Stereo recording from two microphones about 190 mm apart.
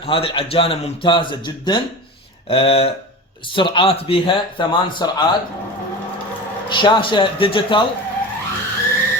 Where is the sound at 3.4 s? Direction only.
25° left (ahead or behind).